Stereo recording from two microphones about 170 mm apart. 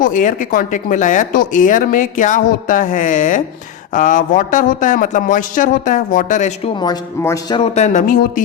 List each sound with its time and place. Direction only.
0.0 s speech: 50° left (ahead or behind)
6.7 s speech: 25° left (ahead or behind)
7.5 s speech: 40° left (ahead or behind)